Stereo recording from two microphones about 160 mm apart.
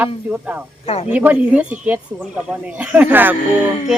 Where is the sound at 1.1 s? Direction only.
10° right (ahead or behind).